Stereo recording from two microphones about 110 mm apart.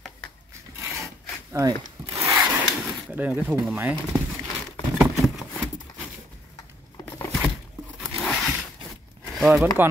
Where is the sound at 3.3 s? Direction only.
10° right (ahead or behind).